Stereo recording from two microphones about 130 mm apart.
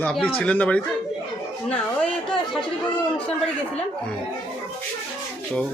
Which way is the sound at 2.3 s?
5° left (ahead or behind).